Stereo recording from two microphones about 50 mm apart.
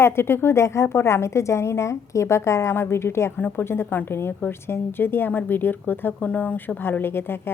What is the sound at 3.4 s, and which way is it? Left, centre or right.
Speech, left.